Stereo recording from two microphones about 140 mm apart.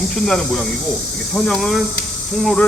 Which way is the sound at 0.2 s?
5° left (ahead or behind).